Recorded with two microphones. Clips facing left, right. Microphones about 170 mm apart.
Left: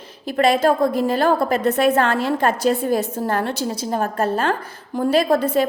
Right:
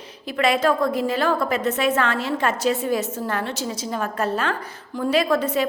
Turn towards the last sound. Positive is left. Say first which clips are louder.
# left 3 dB
turn(degrees=50)  # may be behind; listen again after turning